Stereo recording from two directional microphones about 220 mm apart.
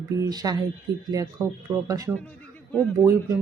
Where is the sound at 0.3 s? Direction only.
15° right (ahead or behind).